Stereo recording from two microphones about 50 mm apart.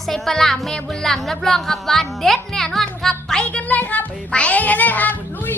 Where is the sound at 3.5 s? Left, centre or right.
Left.